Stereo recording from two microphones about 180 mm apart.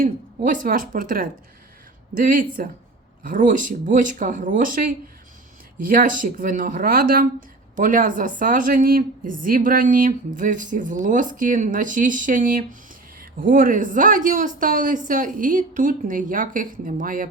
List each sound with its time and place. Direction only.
0.0 s speech: 50° right (ahead or behind)